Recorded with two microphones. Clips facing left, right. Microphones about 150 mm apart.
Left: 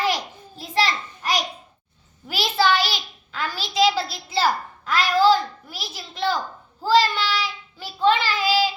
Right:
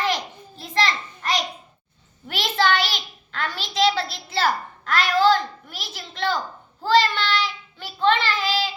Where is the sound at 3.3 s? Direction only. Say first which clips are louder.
Left 2 dB; centre (ahead or behind).